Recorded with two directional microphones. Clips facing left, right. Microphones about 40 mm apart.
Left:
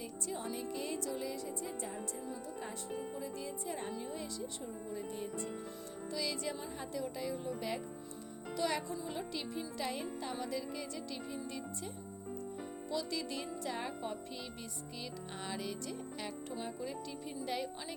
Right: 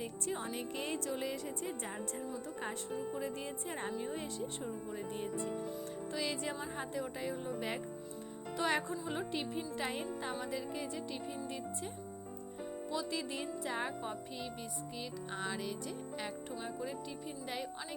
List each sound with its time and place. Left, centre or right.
0.0 s speech: right
3.2 s speech: right
12.9 s speech: right
15.3 s music: centre